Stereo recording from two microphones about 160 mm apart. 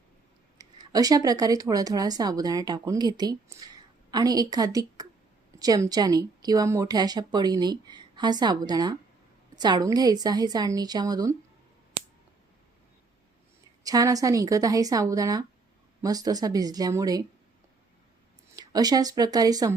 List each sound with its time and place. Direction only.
0.6 s speech: 25° right (ahead or behind)
13.8 s speech: 20° right (ahead or behind)
18.5 s speech: 25° right (ahead or behind)